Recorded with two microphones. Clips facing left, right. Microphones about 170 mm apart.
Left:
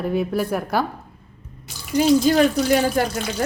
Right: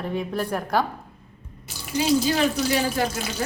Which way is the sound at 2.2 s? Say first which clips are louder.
Left 6 dB; 50° left (ahead or behind).